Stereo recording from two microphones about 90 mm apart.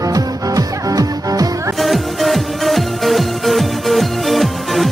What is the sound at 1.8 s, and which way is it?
Music, centre (ahead or behind).